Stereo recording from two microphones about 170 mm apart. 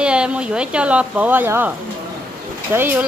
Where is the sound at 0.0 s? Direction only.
5° right (ahead or behind).